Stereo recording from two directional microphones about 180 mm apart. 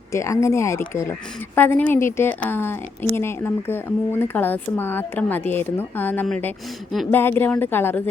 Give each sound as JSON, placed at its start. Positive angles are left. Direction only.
{"t": 0.1, "sound": "speech", "side_deg": 15}